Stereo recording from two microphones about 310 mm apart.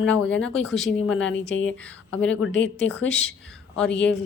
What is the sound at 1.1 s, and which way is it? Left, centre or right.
A woman's voice, left.